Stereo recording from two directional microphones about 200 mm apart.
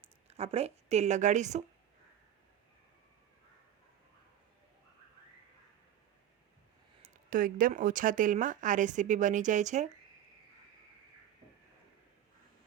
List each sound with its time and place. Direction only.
0.3 s speech: 30° right (ahead or behind)
7.0 s speech: 45° right (ahead or behind)